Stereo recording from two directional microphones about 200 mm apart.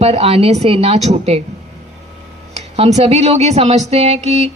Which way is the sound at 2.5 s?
35° right (ahead or behind).